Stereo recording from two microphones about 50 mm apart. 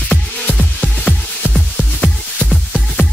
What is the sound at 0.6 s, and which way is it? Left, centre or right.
Music, centre.